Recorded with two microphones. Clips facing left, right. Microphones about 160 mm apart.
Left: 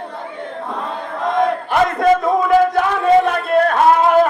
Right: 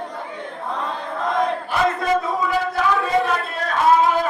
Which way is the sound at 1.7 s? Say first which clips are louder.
Left 6 dB; 55° left (ahead or behind).